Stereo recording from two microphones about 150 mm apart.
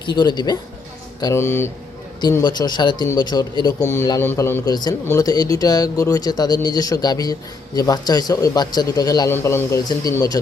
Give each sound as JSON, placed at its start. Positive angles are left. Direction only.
{"t": 0.0, "sound": "a man's voice", "side_deg": 30}
{"t": 1.2, "sound": "a man's voice", "side_deg": 15}
{"t": 2.4, "sound": "a man's voice", "side_deg": 30}
{"t": 4.6, "sound": "a man's voice", "side_deg": 25}